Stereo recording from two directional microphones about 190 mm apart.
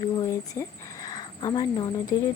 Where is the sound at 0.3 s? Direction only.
15° left (ahead or behind).